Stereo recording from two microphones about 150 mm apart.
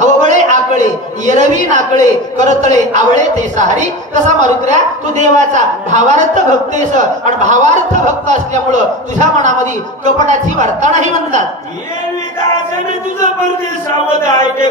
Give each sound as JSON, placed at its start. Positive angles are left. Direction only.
{"t": 0.0, "sound": "a man's voice", "side_deg": -55}